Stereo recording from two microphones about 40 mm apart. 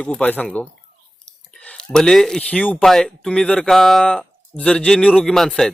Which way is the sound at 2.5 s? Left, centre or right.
Left.